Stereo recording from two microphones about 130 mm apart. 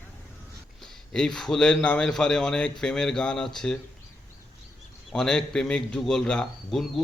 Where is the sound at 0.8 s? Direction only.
5° left (ahead or behind).